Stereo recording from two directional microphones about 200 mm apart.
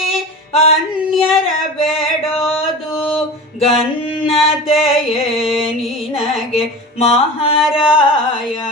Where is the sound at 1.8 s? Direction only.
30° left (ahead or behind).